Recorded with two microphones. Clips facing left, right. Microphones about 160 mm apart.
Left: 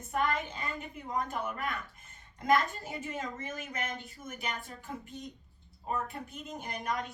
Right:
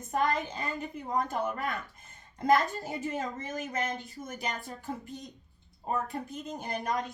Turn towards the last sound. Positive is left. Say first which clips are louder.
# right 3 dB
turn(degrees=-35)  # may be behind; listen again after turning